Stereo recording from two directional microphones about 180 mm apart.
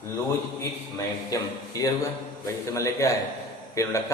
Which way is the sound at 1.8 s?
20° left (ahead or behind).